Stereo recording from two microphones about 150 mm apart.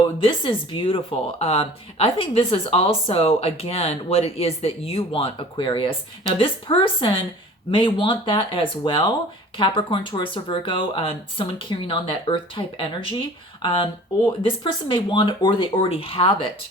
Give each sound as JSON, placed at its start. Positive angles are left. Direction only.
{"t": 0.2, "sound": "speech", "side_deg": 35}